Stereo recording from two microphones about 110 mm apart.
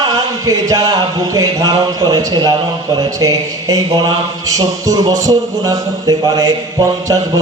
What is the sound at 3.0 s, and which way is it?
Mantra, 35° right (ahead or behind).